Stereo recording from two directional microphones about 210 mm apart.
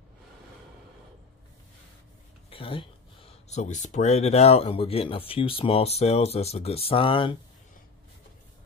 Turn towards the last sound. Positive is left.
turn(degrees=25)  # may be behind; listen again after turning